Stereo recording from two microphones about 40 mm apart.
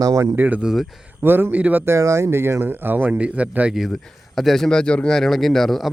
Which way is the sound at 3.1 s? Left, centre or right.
Right.